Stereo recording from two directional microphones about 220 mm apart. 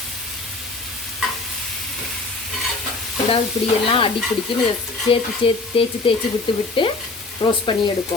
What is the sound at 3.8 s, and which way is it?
Speech, 25° left (ahead or behind).